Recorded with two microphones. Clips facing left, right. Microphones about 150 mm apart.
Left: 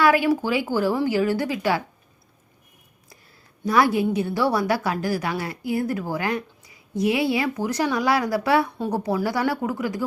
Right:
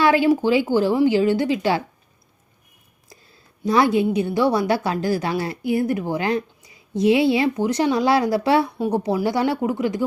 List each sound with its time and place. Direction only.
0.0 s a woman's voice: 25° right (ahead or behind)
3.7 s a woman's voice: 20° right (ahead or behind)